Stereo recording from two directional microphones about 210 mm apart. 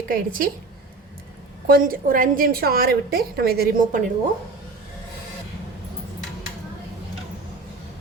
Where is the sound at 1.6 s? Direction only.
45° right (ahead or behind).